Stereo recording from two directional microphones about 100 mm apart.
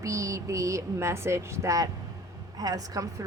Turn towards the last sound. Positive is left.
turn(degrees=-35)  # may be behind; listen again after turning